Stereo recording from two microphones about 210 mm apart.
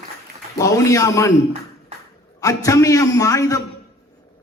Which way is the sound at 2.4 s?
15° left (ahead or behind).